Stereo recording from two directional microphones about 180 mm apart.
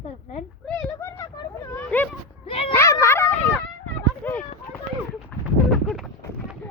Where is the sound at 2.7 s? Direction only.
15° left (ahead or behind).